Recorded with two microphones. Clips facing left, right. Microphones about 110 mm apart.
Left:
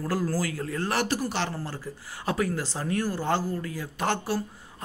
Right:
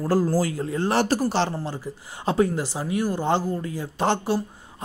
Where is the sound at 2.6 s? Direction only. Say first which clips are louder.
Right 3 dB; 15° right (ahead or behind).